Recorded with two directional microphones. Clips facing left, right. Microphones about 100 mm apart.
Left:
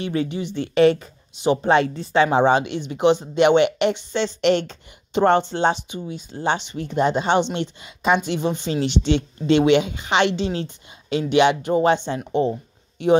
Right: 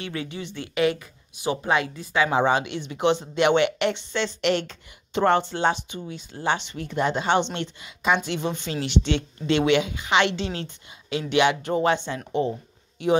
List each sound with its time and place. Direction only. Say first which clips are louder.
0.0 s a woman's voice: left 8 dB; 25° left (ahead or behind)
0.7 s a woman's voice: left 7 dB; 30° left (ahead or behind)
5.9 s a woman's voice: left 4 dB; 20° left (ahead or behind)